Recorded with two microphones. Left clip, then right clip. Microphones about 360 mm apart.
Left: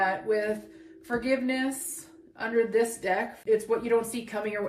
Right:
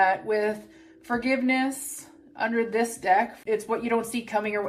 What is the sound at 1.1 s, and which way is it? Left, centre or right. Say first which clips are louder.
Speech: right 3 dB; right.